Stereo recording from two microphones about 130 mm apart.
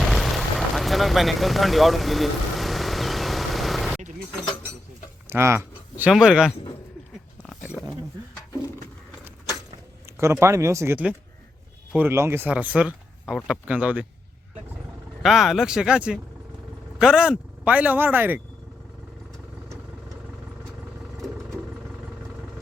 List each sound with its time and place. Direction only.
0.0 s vehicle: centre (ahead or behind)
5.3 s a sound: 20° right (ahead or behind)
6.1 s speech: 5° right (ahead or behind)
10.1 s a sound: 20° right (ahead or behind)
10.4 s speech: 20° right (ahead or behind)
15.2 s speech: centre (ahead or behind)
21.2 s vehicle: centre (ahead or behind)